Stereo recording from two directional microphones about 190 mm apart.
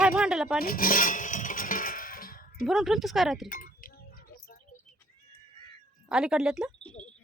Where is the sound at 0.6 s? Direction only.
50° left (ahead or behind).